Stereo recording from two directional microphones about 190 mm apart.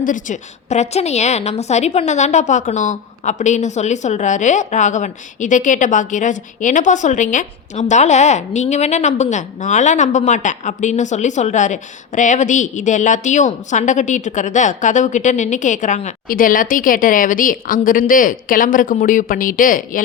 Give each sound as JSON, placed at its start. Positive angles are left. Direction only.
{"t": 0.0, "sound": "a woman's voice", "side_deg": 45}